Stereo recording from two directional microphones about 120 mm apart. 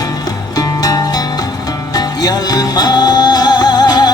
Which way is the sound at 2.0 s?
35° left (ahead or behind).